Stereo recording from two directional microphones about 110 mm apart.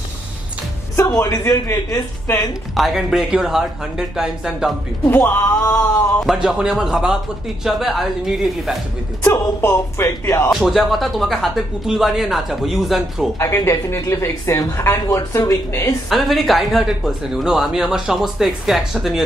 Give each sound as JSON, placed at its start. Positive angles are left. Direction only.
{"t": 0.9, "sound": "speech", "side_deg": 25}
{"t": 2.7, "sound": "speech", "side_deg": 0}
{"t": 5.0, "sound": "speech", "side_deg": 15}
{"t": 6.2, "sound": "speech", "side_deg": -5}
{"t": 9.2, "sound": "speech", "side_deg": 20}
{"t": 10.5, "sound": "speech", "side_deg": 0}
{"t": 13.4, "sound": "speech", "side_deg": 25}
{"t": 16.1, "sound": "speech", "side_deg": 0}